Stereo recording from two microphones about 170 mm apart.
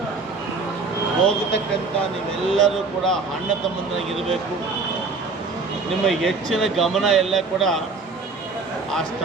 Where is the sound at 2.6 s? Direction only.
Centre (ahead or behind).